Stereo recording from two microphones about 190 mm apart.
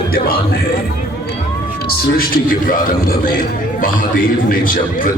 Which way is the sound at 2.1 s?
50° left (ahead or behind).